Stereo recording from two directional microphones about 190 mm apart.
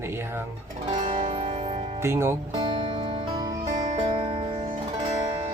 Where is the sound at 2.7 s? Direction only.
30° right (ahead or behind).